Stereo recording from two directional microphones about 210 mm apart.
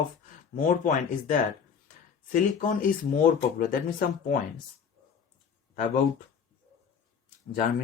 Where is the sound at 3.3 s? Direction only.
40° left (ahead or behind).